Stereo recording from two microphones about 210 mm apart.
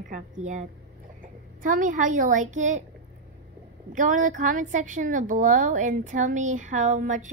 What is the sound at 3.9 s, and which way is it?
A woman's voice, 40° right (ahead or behind).